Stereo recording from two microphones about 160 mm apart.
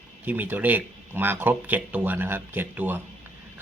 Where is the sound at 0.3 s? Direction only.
10° right (ahead or behind).